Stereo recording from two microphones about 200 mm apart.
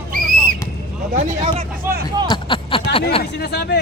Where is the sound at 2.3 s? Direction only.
25° left (ahead or behind).